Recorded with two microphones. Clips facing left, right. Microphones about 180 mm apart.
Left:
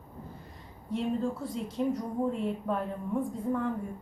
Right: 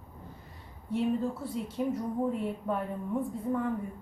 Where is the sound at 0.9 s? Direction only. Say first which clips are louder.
Right 1 dB; 5° right (ahead or behind).